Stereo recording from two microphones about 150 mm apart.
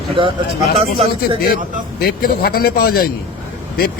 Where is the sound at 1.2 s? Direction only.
90° left.